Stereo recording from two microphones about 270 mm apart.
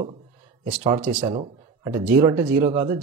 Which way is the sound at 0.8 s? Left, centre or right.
Right.